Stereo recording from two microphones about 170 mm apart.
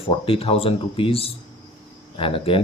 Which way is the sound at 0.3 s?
35° left (ahead or behind).